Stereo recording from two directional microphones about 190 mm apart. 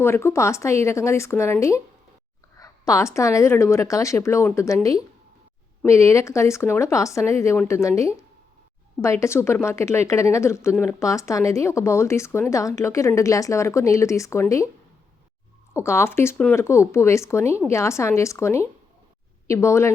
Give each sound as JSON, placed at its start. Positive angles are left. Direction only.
{"t": 0.0, "sound": "speech", "side_deg": 15}
{"t": 9.2, "sound": "speech", "side_deg": 15}
{"t": 15.7, "sound": "speech", "side_deg": 15}